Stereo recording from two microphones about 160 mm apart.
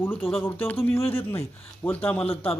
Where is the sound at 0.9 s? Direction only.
35° left (ahead or behind).